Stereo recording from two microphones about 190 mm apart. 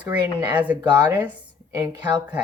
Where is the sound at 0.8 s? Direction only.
20° right (ahead or behind).